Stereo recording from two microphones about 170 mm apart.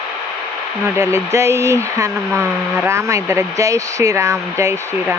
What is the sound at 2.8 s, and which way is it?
Speech, 15° right (ahead or behind).